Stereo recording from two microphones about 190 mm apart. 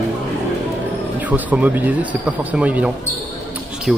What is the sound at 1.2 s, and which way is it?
Speech, 10° right (ahead or behind).